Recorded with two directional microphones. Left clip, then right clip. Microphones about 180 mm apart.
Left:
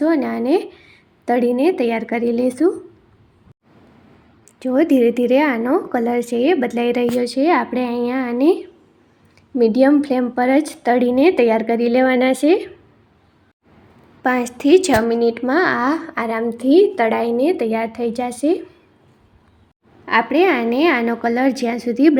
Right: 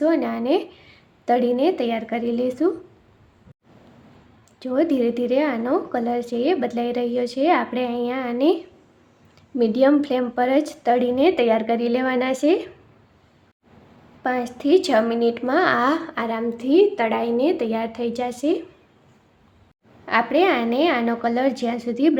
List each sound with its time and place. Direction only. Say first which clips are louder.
0.0 s a woman's voice: left 3 dB; 20° left (ahead or behind)
4.6 s speech: left 6 dB; 20° left (ahead or behind)
9.6 s a woman's voice: left 4 dB; 15° left (ahead or behind)
14.2 s speech: left 5 dB; 25° left (ahead or behind)
20.1 s a woman's voice: left 3 dB; 15° left (ahead or behind)